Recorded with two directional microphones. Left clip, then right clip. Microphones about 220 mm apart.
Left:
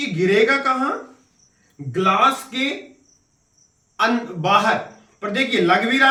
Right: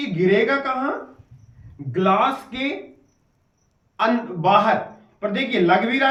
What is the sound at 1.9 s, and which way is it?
Speech, 15° left (ahead or behind).